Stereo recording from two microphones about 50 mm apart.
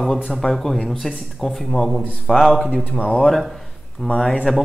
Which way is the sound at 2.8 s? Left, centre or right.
Left.